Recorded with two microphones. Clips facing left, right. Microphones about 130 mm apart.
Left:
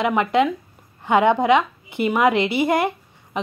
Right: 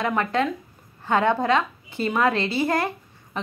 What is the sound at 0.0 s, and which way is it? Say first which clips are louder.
A woman's voice: left 5 dB; 15° left (ahead or behind).